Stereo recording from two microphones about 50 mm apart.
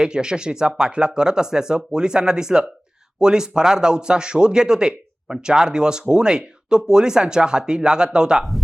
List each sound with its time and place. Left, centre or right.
0.0 s speech: centre